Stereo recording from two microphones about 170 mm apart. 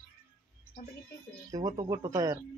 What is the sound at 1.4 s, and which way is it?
Speech, 20° right (ahead or behind).